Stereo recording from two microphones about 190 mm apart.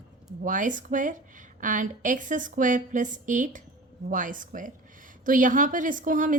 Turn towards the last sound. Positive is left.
turn(degrees=-45)  # may be behind; listen again after turning